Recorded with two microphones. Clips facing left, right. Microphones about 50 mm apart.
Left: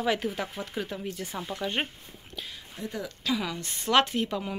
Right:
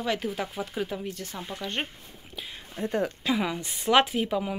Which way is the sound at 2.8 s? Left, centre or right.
Right.